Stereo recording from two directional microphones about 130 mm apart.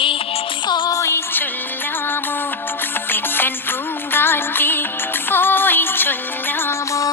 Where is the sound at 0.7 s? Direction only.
25° left (ahead or behind).